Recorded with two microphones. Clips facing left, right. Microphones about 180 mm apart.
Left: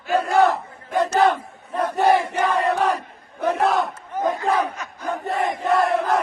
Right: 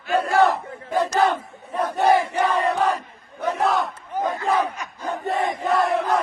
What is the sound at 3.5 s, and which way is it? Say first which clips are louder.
Battle cry: left 2 dB; centre (ahead or behind).